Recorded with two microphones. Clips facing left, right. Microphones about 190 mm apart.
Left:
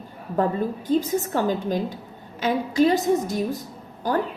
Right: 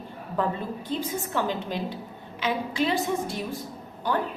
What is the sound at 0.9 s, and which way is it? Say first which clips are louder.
A woman's voice: left 9 dB; 45° left (ahead or behind).